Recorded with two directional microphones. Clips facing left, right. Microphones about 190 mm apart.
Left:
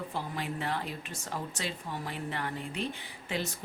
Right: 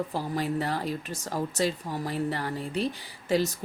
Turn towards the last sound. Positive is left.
turn(degrees=-40)  # may be behind; listen again after turning